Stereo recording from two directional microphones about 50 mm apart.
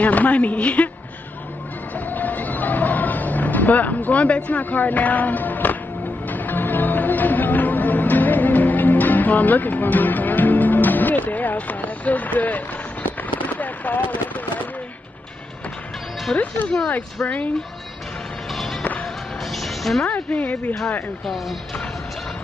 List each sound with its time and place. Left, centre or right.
0.0 s a woman's voice: left
2.0 s a sound: left
6.2 s music: left
16.9 s a woman's voice: left
18.5 s music: centre
20.1 s speech: left